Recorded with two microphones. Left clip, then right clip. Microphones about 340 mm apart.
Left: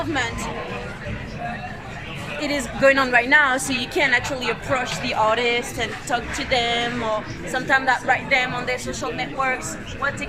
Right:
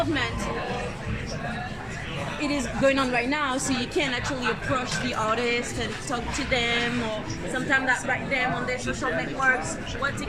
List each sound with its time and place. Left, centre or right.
2.4 s a woman's voice: left